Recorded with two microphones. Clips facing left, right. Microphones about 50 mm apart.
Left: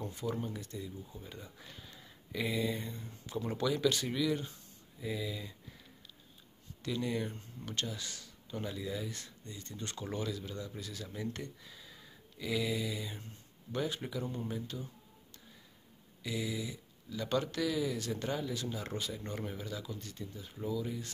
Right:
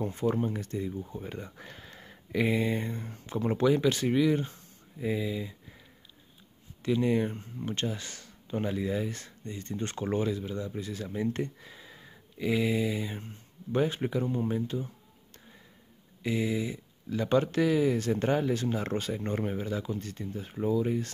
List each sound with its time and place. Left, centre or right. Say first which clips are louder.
0.0 s speech: right 9 dB; right
6.8 s speech: right 9 dB; right
16.2 s speech: right 8 dB; right